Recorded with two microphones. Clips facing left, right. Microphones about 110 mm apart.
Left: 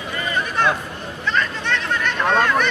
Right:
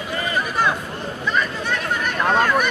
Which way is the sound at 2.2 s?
10° right (ahead or behind).